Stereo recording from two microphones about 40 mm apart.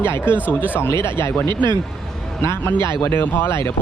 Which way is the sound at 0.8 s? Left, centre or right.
Left.